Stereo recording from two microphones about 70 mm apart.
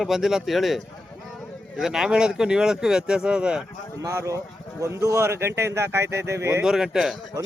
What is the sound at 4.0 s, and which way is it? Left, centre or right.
Speech, right.